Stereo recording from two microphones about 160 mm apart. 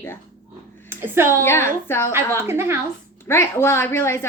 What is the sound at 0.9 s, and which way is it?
Speech, 15° right (ahead or behind).